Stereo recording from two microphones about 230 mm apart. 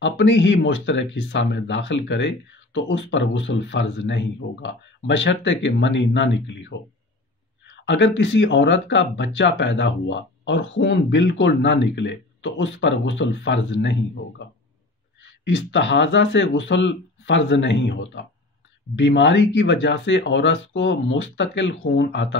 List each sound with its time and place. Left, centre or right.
0.0 s speech: left
7.8 s speech: left
15.4 s speech: left